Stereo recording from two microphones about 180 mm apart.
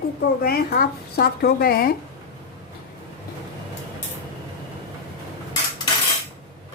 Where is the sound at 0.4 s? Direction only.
60° left (ahead or behind).